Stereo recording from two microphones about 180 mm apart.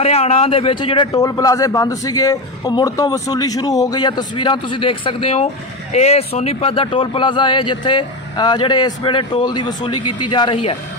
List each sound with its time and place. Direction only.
0.0 s a man's voice: 35° left (ahead or behind)